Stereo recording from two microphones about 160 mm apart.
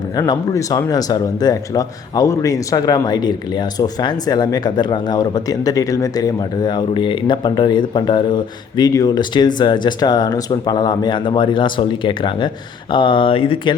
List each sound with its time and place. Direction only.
0.2 s speech: 20° left (ahead or behind)